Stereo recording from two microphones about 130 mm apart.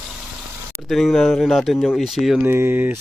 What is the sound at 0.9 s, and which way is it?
Speech, centre (ahead or behind).